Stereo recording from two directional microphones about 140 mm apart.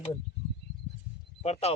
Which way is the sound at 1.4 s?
50° left (ahead or behind).